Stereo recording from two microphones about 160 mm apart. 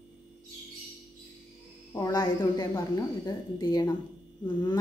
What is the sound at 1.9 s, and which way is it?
A woman's voice, 25° left (ahead or behind).